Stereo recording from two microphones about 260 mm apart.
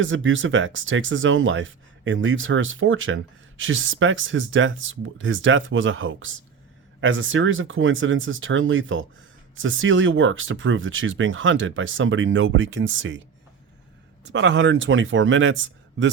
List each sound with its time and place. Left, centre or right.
0.0 s speech: right
14.3 s speech: right